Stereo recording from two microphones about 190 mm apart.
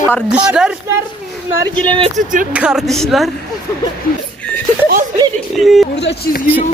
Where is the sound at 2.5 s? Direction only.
5° right (ahead or behind).